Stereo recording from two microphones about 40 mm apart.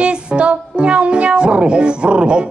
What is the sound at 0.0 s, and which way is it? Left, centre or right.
Speech, right.